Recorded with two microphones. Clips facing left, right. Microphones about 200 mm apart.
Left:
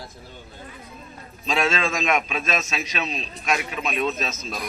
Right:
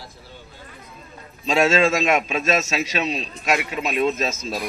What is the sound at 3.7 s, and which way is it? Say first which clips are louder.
Speech: right 4 dB; 25° right (ahead or behind).